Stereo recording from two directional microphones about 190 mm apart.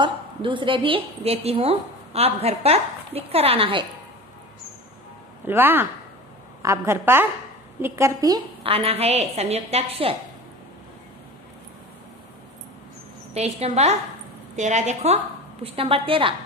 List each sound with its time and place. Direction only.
0.0 s a woman's voice: 25° right (ahead or behind)
5.5 s a woman's voice: 10° right (ahead or behind)
8.6 s a woman's voice: 30° right (ahead or behind)
13.3 s a woman's voice: 35° right (ahead or behind)